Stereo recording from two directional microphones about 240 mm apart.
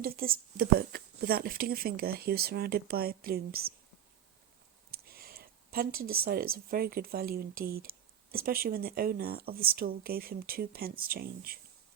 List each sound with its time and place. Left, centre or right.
0.0 s speech: right
5.0 s speech: right